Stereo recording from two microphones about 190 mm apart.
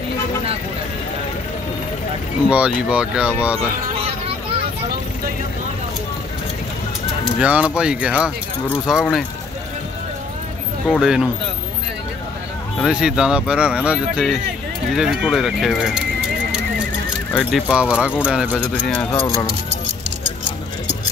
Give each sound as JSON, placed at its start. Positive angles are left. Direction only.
{"t": 2.5, "sound": "speech", "side_deg": -5}
{"t": 7.3, "sound": "speech", "side_deg": -5}
{"t": 10.9, "sound": "speech", "side_deg": -5}
{"t": 12.7, "sound": "speech", "side_deg": 0}
{"t": 17.3, "sound": "speech", "side_deg": 0}
{"t": 18.7, "sound": "speech", "side_deg": 10}
{"t": 19.1, "sound": "speech", "side_deg": 25}